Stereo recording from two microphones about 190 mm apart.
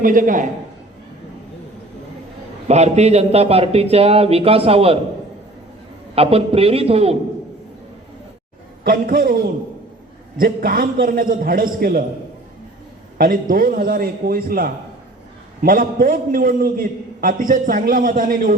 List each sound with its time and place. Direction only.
0.0 s a man's voice: 45° right (ahead or behind)
2.6 s a man's voice: 35° right (ahead or behind)
6.1 s a man's voice: 30° right (ahead or behind)
8.8 s a man's voice: 50° right (ahead or behind)
13.1 s a man's voice: 45° right (ahead or behind)